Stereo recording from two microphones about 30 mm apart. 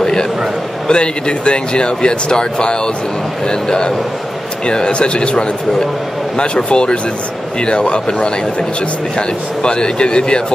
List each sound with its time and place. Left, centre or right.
0.0 s a sound: left
0.8 s a man's voice: left
9.6 s speech: left